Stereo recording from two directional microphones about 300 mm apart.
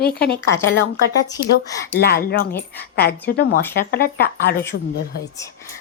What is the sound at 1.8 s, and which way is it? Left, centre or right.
Speech, left.